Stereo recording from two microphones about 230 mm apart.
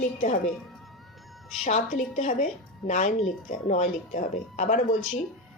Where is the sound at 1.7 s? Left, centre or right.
Left.